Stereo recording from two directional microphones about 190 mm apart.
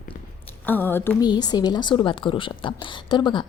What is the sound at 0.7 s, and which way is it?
Speech, 10° left (ahead or behind).